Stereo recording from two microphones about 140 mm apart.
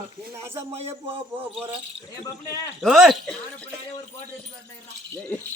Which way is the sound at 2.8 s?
Centre (ahead or behind).